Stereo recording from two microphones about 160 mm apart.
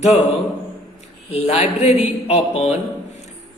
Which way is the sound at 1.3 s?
40° left (ahead or behind).